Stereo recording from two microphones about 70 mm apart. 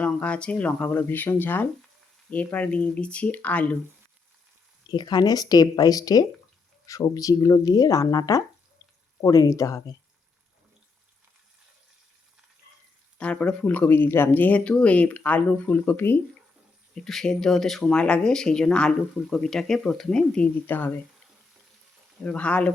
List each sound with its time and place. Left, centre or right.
0.0 s speech: centre
4.9 s speech: left
9.2 s speech: left
13.1 s speech: centre; by 16.1 s left
16.9 s speech: centre
20.7 s speech: left
22.2 s speech: centre